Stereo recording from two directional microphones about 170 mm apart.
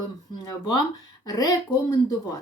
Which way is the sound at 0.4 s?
25° left (ahead or behind).